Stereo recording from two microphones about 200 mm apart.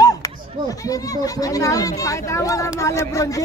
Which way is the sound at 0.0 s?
20° left (ahead or behind).